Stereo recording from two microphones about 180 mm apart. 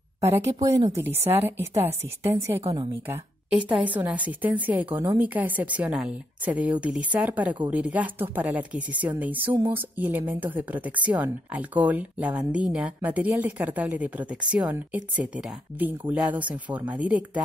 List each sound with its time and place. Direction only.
0.2 s a woman's voice: 15° right (ahead or behind)
0.7 s speech: 35° right (ahead or behind)
1.0 s a woman's voice: 15° right (ahead or behind)